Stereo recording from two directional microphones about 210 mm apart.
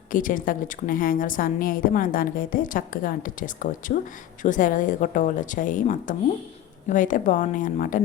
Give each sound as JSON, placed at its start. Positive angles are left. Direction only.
{"t": 0.1, "sound": "a woman's voice", "side_deg": 40}